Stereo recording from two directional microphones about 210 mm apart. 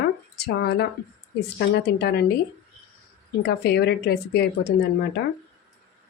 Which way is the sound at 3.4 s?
50° left (ahead or behind).